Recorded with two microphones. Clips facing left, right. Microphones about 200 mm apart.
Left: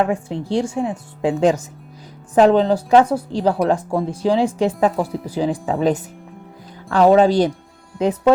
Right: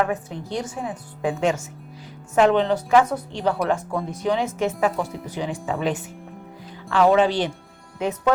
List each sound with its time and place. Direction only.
0.0 s a woman's voice: 30° left (ahead or behind)